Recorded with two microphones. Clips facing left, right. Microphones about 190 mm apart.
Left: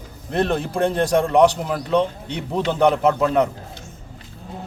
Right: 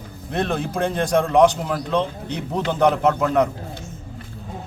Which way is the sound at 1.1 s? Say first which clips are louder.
Right 1 dB; 10° left (ahead or behind).